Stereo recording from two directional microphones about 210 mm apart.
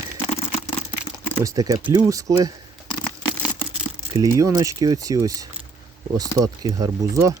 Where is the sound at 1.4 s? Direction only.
15° right (ahead or behind).